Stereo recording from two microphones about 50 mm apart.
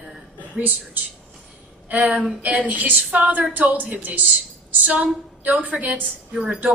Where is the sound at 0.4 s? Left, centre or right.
Right.